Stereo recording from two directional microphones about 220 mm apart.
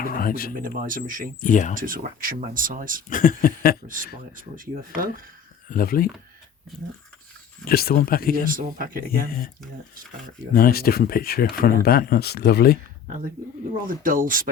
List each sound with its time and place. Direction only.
0.0 s a sound: 40° left (ahead or behind)
0.6 s speech: 40° right (ahead or behind)
1.4 s speech: 35° left (ahead or behind)
1.7 s speech: 40° right (ahead or behind)
3.1 s speech: 40° left (ahead or behind)
4.5 s speech: 40° right (ahead or behind)
5.6 s speech: 40° left (ahead or behind)
7.7 s speech: 45° left (ahead or behind)
8.4 s speech: 40° right (ahead or behind)
10.5 s speech: 45° left (ahead or behind)
13.8 s speech: 40° right (ahead or behind)